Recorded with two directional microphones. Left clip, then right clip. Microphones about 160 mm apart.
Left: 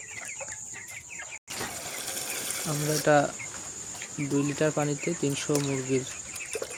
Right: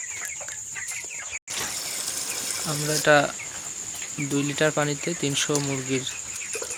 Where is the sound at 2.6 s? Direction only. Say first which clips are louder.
Right 3 dB; centre (ahead or behind).